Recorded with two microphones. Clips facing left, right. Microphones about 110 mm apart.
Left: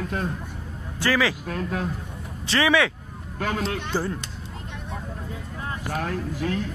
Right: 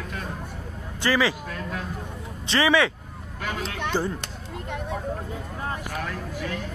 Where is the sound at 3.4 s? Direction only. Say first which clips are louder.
Left 5 dB; 35° left (ahead or behind).